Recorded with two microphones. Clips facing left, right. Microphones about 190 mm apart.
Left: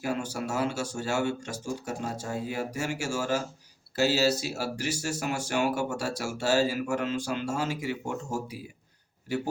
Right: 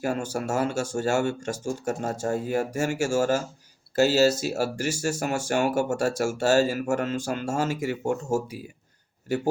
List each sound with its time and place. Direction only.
0.0 s speech: 45° right (ahead or behind)